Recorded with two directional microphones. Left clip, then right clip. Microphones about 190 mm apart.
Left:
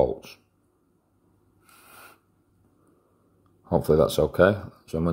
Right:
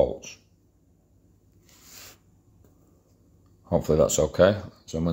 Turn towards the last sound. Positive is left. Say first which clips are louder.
# even
turn(degrees=30)  # may be behind; listen again after turning